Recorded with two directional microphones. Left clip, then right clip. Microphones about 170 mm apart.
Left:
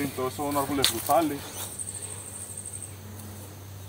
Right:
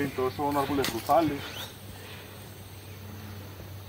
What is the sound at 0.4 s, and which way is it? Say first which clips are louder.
Speech: even; 25° left (ahead or behind).